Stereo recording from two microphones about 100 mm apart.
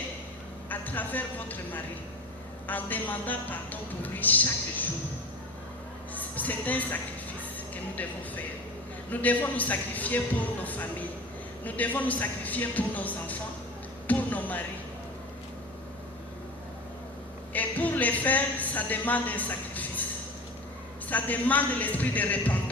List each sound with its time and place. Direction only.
0.7 s a woman's voice: 15° left (ahead or behind)
6.1 s speech: 15° left (ahead or behind)
9.0 s speech: 15° left (ahead or behind)
17.5 s speech: 15° left (ahead or behind)
21.1 s speech: 15° left (ahead or behind)